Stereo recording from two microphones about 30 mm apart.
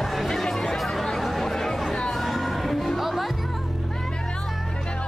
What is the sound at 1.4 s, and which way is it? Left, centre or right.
Chatter, centre.